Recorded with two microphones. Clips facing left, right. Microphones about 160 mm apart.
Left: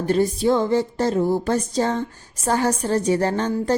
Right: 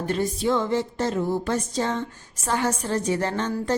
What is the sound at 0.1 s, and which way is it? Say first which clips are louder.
Music: left 5 dB; 35° left (ahead or behind).